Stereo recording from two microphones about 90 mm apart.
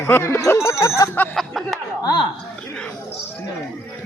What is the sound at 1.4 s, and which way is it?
Speech, centre (ahead or behind).